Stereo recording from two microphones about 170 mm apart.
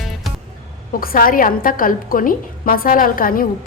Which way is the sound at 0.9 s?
60° left (ahead or behind).